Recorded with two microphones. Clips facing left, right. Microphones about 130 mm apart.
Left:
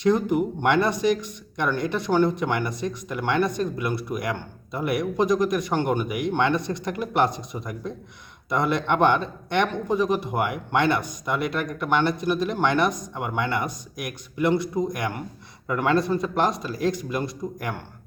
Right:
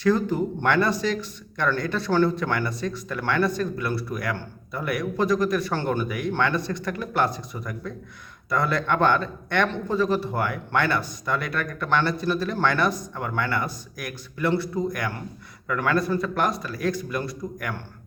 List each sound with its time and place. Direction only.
0.0 s speech: 20° left (ahead or behind)